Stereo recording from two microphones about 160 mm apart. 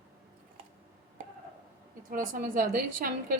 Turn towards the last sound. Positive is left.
turn(degrees=-60)  # may be behind; listen again after turning